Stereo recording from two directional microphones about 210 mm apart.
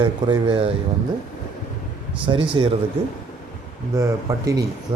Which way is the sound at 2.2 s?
25° right (ahead or behind).